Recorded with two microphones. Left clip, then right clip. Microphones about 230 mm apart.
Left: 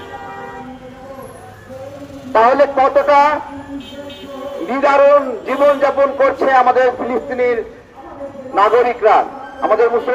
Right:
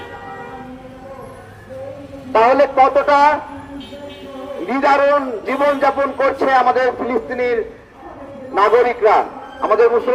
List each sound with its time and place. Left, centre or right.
2.3 s a man's voice: right
4.6 s a man's voice: right